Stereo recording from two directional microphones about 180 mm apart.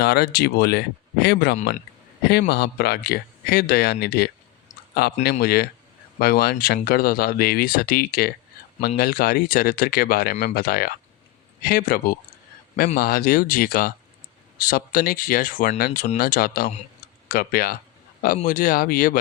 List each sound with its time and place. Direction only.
0.0 s speech: 60° left (ahead or behind)